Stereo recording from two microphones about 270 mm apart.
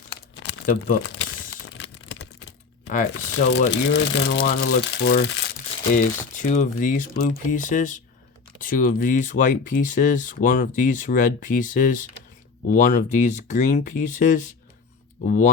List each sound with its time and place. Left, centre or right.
0.4 s crumpling: left
2.8 s speech: left
3.7 s speech: left
4.4 s speech: left
5.9 s speech: left